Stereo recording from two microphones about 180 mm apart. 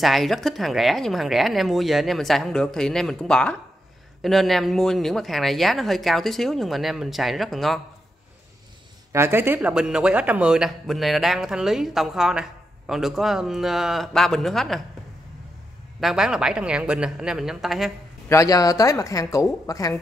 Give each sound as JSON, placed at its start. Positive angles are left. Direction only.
{"t": 0.0, "sound": "speech", "side_deg": 0}
{"t": 9.1, "sound": "speech", "side_deg": -15}
{"t": 16.0, "sound": "speech", "side_deg": -5}
{"t": 18.3, "sound": "speech", "side_deg": 20}